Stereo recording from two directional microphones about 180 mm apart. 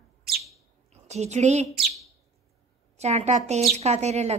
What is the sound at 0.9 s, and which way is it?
Speech, 40° right (ahead or behind).